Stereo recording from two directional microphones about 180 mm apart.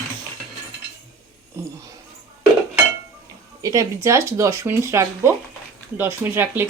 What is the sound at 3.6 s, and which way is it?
Speech, 20° right (ahead or behind).